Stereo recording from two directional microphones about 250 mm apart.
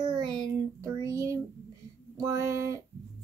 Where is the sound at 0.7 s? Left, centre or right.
Centre.